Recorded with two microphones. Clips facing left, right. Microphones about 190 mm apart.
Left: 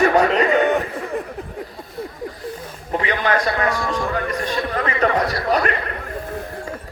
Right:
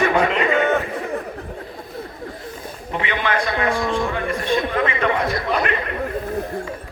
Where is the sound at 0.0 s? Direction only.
40° left (ahead or behind).